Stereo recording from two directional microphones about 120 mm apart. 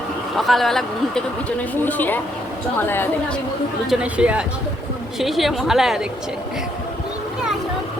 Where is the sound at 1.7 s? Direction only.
15° left (ahead or behind).